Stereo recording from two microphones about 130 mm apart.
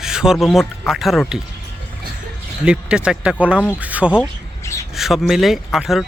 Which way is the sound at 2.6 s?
5° right (ahead or behind).